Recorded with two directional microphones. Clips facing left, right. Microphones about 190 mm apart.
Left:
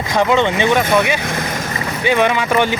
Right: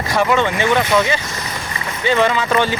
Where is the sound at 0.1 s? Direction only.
20° left (ahead or behind).